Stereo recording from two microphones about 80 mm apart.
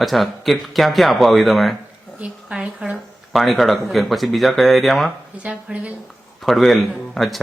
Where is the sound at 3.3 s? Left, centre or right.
Centre.